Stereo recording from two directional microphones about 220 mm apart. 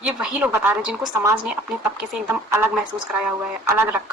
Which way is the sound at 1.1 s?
20° right (ahead or behind).